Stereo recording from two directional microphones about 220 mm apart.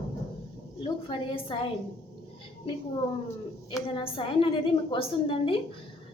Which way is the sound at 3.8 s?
25° left (ahead or behind).